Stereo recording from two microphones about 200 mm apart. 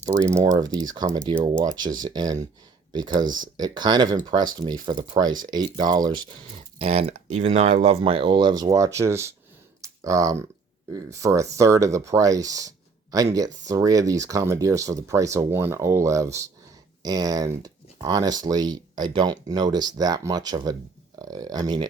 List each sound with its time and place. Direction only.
0.5 s speech: 20° right (ahead or behind)
9.8 s a sound: 15° right (ahead or behind)
10.9 s speech: 15° right (ahead or behind)